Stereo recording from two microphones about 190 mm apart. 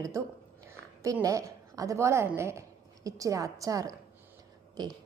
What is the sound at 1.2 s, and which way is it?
A woman's voice, 15° right (ahead or behind).